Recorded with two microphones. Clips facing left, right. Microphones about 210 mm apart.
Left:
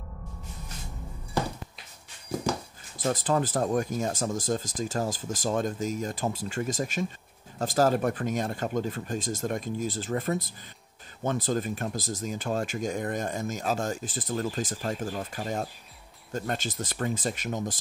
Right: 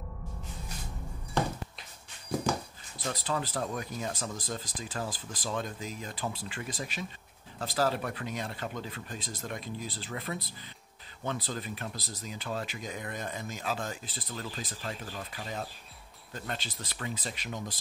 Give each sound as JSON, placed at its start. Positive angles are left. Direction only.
{"t": 3.0, "sound": "speech", "side_deg": 45}